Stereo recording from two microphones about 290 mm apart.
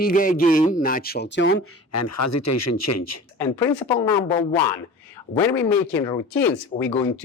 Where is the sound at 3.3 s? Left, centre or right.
Centre.